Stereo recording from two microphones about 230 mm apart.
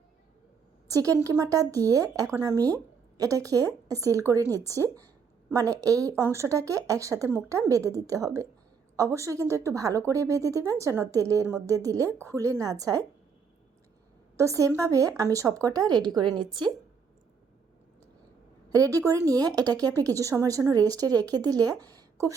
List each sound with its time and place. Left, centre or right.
0.9 s speech: centre
14.3 s speech: centre
18.7 s speech: centre